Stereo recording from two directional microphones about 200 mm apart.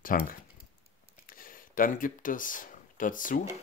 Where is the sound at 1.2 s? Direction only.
45° left (ahead or behind).